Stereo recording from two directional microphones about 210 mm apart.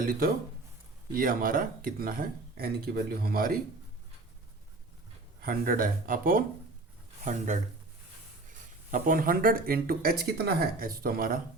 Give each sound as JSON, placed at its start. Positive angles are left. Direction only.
{"t": 0.0, "sound": "speech", "side_deg": -45}
{"t": 5.4, "sound": "speech", "side_deg": -45}